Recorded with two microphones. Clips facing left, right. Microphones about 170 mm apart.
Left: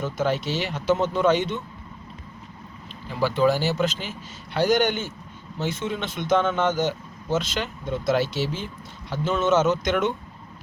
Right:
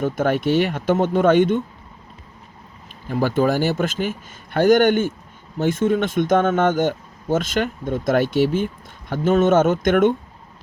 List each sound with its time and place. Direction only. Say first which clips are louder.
0.0 s speech: right 5 dB; 55° right (ahead or behind)
3.1 s speech: right 2 dB; 50° right (ahead or behind)